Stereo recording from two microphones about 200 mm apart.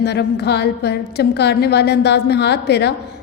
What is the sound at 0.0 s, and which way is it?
A woman's voice, 55° left (ahead or behind).